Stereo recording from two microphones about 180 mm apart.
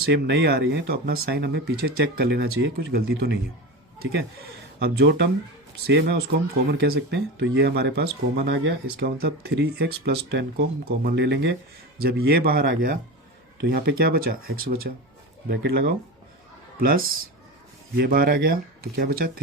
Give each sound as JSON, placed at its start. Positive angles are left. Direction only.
{"t": 0.0, "sound": "speech", "side_deg": -70}
{"t": 4.8, "sound": "speech", "side_deg": -75}
{"t": 5.8, "sound": "speech", "side_deg": -65}
{"t": 11.9, "sound": "speech", "side_deg": -60}